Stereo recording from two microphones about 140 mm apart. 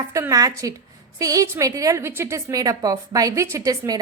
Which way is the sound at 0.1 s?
25° right (ahead or behind).